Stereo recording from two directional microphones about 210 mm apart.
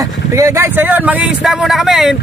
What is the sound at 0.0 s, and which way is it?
Speech, 15° right (ahead or behind).